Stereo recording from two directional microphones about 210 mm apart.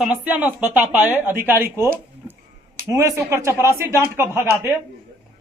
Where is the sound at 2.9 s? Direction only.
15° right (ahead or behind).